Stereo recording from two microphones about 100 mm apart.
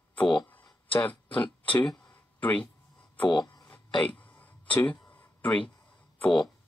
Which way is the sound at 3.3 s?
45° left (ahead or behind).